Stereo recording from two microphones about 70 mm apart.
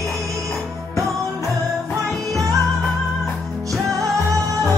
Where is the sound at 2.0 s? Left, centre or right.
Right.